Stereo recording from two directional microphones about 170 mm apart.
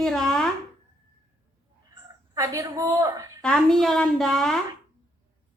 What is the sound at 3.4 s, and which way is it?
A woman's voice, 5° left (ahead or behind).